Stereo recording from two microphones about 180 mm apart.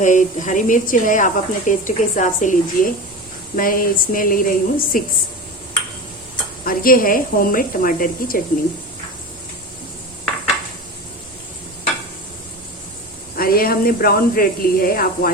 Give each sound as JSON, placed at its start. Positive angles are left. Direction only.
{"t": 0.0, "sound": "a woman's voice", "side_deg": 45}
{"t": 6.7, "sound": "a woman's voice", "side_deg": 50}
{"t": 13.3, "sound": "speech", "side_deg": 55}